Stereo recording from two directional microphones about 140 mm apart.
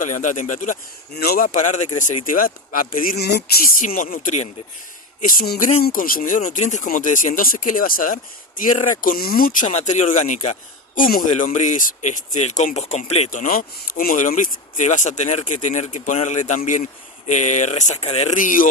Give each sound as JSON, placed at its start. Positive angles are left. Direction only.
{"t": 0.0, "sound": "speech", "side_deg": 65}
{"t": 1.2, "sound": "speech", "side_deg": 85}
{"t": 13.3, "sound": "speech", "side_deg": 70}
{"t": 18.4, "sound": "speech", "side_deg": 75}